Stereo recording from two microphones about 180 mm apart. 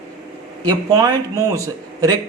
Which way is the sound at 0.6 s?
20° right (ahead or behind).